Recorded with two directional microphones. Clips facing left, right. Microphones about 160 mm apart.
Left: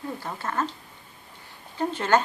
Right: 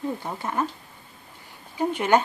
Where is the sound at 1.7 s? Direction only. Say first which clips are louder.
Right 2 dB; 15° right (ahead or behind).